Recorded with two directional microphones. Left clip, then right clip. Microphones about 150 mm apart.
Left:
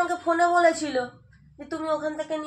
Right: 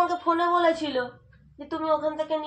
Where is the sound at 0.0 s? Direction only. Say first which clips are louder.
Left 1 dB; 15° right (ahead or behind).